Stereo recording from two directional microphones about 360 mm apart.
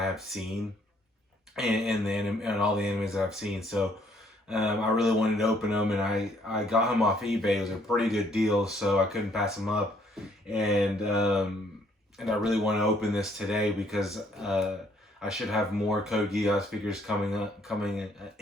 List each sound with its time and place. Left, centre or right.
0.0 s speech: centre
1.5 s speech: centre